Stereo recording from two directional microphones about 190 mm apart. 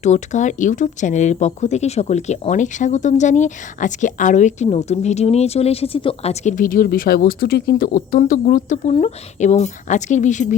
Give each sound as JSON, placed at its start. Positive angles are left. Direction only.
{"t": 0.0, "sound": "speech", "side_deg": 40}
{"t": 6.6, "sound": "speech", "side_deg": 45}